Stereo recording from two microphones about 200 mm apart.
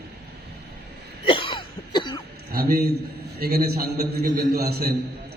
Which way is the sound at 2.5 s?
50° right (ahead or behind).